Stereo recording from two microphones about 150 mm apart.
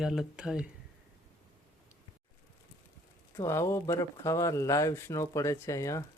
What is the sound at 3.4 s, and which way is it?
Speech, 20° left (ahead or behind).